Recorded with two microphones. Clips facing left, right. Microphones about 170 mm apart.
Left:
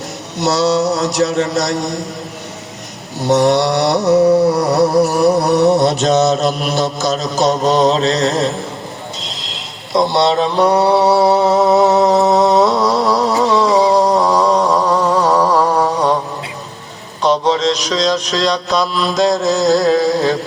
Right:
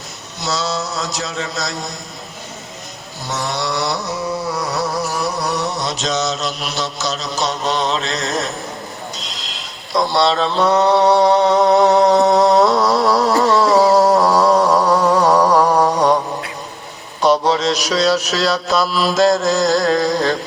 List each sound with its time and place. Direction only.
0.3 s a sound: 70° left (ahead or behind)
3.2 s mantra: 70° left (ahead or behind); by 8.4 s 30° left (ahead or behind)
9.9 s mantra: 20° left (ahead or behind); by 14.6 s 5° right (ahead or behind)
14.7 s a sound: 10° right (ahead or behind)
15.5 s music: 10° right (ahead or behind)
17.2 s mantra: 10° right (ahead or behind)